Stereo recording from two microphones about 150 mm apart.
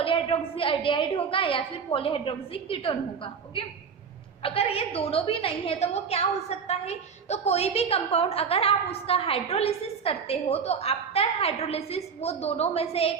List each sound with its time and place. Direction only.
0.0 s a woman's voice: 35° left (ahead or behind)
4.4 s a woman's voice: 40° left (ahead or behind)